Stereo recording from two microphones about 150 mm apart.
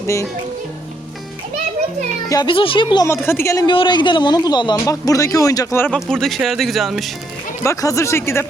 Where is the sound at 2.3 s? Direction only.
30° left (ahead or behind).